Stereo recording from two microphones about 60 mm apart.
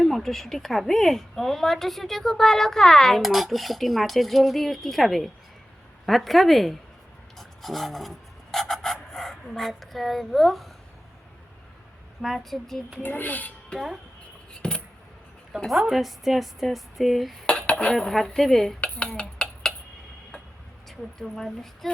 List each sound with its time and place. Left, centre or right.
0.0 s speech: centre
7.3 s rub: centre
8.5 s a sound: centre
12.2 s speech: centre
13.0 s speech: left
13.7 s speech: centre
14.6 s a sound: centre
15.8 s speech: centre
17.7 s dishes: centre
18.3 s dishes: centre
18.8 s dishes: centre
21.2 s speech: centre